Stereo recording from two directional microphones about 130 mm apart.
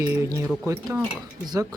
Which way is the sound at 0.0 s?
25° right (ahead or behind).